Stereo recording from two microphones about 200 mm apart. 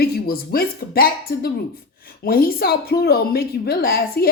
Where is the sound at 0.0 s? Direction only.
50° left (ahead or behind).